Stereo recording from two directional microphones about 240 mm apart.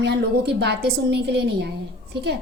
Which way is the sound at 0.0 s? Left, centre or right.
Right.